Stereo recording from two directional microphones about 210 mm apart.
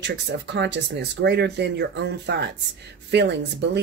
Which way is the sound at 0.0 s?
55° right (ahead or behind).